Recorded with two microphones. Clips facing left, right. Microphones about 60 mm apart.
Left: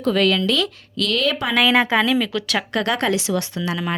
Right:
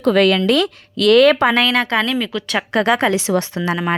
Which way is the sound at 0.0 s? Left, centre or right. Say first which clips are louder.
Right 4 dB; right.